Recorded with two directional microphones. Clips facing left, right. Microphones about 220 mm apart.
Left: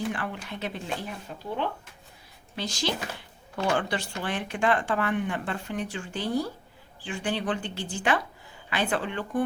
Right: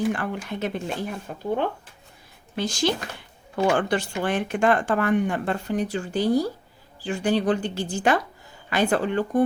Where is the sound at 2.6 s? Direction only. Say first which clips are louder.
Right 6 dB; 50° right (ahead or behind).